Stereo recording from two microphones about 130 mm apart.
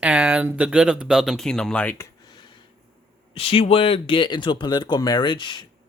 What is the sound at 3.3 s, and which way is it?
Speech, 45° left (ahead or behind).